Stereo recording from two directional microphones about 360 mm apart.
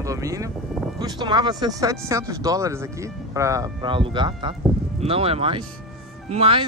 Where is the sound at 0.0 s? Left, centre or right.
Centre.